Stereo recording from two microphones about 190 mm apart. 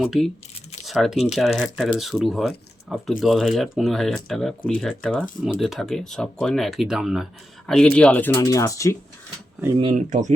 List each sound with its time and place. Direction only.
0.0 s speech: centre (ahead or behind); by 9.0 s 15° left (ahead or behind)
9.9 s speech: 40° right (ahead or behind)